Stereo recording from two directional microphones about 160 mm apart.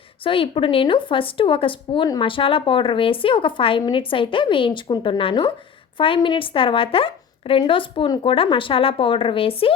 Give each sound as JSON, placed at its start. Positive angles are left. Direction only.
{"t": 0.3, "sound": "speech", "side_deg": 35}